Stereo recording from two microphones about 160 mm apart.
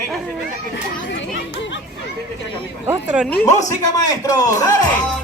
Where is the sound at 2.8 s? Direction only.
5° right (ahead or behind).